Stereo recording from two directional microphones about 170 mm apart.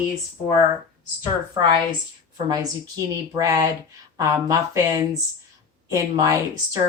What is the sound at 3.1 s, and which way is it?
Speech, 20° right (ahead or behind).